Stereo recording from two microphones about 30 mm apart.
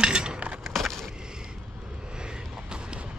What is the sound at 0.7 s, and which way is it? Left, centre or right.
Skateboard, centre.